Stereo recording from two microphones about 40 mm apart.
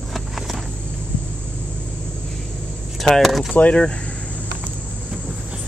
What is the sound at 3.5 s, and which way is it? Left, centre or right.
Speech, left.